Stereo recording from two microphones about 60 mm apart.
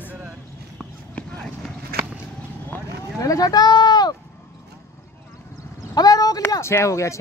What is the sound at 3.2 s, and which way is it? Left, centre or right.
Speech, left.